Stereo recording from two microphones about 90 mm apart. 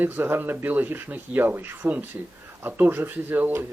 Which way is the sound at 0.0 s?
25° right (ahead or behind).